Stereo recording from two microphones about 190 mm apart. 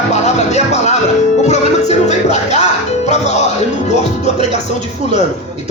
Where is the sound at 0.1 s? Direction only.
35° left (ahead or behind).